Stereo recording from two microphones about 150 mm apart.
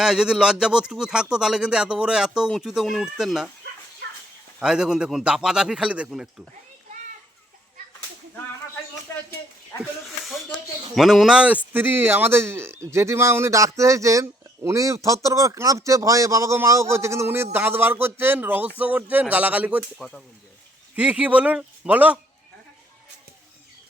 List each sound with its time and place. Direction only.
0.0 s speech: 5° right (ahead or behind)
4.6 s speech: 5° right (ahead or behind)
9.7 s snake: 20° left (ahead or behind)
10.9 s a man's voice: centre (ahead or behind)
20.9 s a man's voice: 10° right (ahead or behind)